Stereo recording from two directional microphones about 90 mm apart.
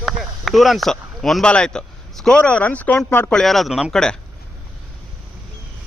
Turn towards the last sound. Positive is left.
turn(degrees=5)  # may be behind; listen again after turning